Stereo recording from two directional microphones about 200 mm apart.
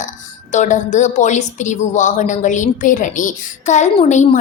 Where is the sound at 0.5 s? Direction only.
40° left (ahead or behind).